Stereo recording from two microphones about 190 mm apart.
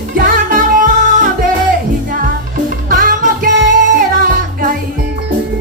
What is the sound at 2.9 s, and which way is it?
Music, 45° right (ahead or behind).